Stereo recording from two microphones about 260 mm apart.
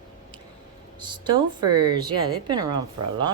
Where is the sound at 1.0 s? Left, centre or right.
Centre.